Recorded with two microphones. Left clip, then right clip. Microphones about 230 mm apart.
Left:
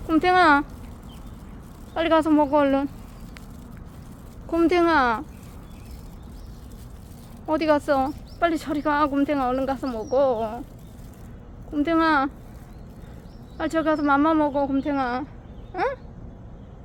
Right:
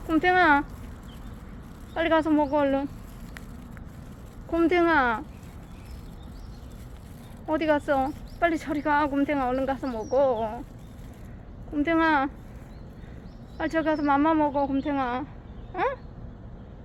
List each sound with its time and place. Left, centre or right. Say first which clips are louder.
0.1 s speech: left 3 dB; left
1.9 s speech: left 3 dB; left
4.5 s speech: left 2 dB; centre
7.4 s speech: left 3 dB; centre
11.7 s speech: left 2 dB; centre
13.6 s speech: left 3 dB; centre
15.7 s a sound: left 2 dB; centre